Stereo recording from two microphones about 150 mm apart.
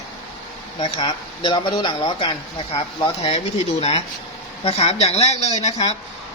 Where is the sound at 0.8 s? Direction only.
30° left (ahead or behind).